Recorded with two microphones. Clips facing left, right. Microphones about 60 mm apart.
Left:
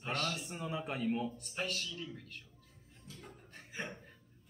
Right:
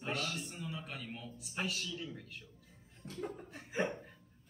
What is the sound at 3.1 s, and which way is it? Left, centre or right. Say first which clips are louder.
Speech: right 11 dB; right.